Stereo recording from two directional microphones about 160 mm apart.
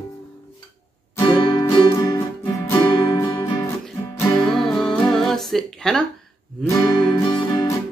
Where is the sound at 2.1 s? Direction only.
20° left (ahead or behind).